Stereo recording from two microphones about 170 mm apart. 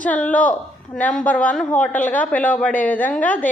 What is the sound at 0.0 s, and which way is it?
A woman's voice, 10° left (ahead or behind).